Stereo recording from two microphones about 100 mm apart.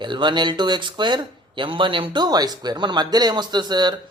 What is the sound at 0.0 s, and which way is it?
Speech, 50° right (ahead or behind).